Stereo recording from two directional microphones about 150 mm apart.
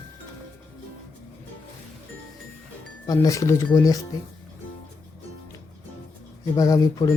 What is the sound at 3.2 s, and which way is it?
Speech, 20° left (ahead or behind).